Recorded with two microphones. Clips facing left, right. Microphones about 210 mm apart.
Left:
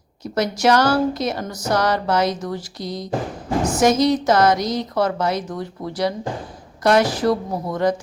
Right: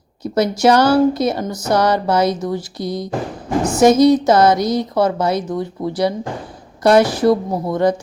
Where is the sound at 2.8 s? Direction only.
60° right (ahead or behind).